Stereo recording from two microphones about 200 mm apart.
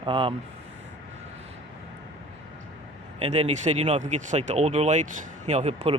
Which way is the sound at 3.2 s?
35° right (ahead or behind).